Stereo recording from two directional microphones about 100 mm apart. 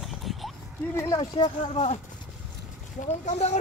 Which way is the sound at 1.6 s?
90° left.